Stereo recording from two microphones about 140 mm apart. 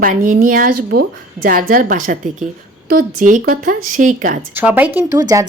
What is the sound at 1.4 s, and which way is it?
Speech, 90° right.